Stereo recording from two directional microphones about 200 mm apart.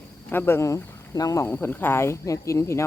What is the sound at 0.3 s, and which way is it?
Speech, 10° left (ahead or behind).